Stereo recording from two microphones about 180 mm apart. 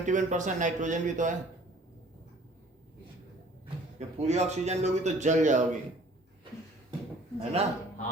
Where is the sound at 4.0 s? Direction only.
40° right (ahead or behind).